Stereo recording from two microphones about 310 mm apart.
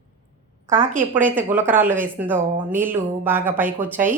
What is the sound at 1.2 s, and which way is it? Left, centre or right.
Speech, centre.